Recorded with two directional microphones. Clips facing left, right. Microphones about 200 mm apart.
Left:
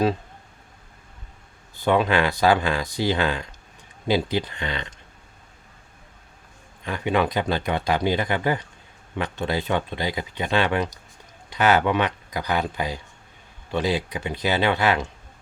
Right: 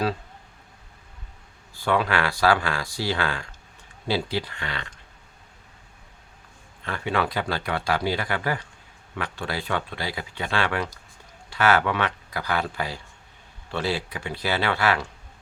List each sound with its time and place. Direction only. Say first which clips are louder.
1.7 s speech: left 4 dB; 20° left (ahead or behind)
6.8 s a man's voice: left 4 dB; 15° left (ahead or behind)